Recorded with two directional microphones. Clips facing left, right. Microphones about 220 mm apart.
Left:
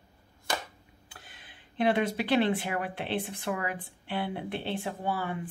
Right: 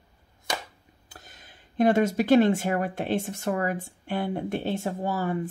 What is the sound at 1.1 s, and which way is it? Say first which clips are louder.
Speech: right 4 dB; 40° right (ahead or behind).